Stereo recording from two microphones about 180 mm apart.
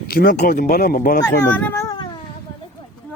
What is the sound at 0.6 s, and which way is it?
Speech, 45° left (ahead or behind).